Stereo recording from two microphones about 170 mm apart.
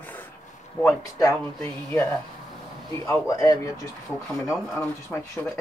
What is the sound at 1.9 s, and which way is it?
Speech, 5° left (ahead or behind).